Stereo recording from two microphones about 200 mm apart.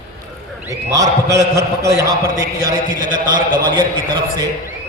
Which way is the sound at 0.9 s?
15° right (ahead or behind).